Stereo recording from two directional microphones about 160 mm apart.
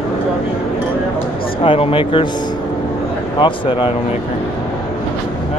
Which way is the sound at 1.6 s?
35° left (ahead or behind).